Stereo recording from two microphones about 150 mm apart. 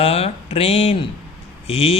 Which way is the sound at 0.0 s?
40° left (ahead or behind).